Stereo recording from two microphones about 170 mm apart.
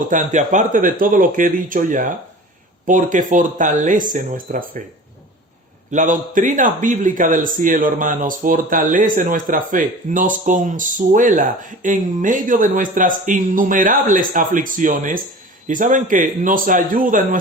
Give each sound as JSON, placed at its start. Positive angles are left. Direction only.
{"t": 0.1, "sound": "a man's voice", "side_deg": -50}
{"t": 5.9, "sound": "a man's voice", "side_deg": -50}